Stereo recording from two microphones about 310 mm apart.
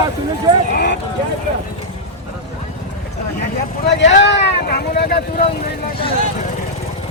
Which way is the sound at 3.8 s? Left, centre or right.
Left.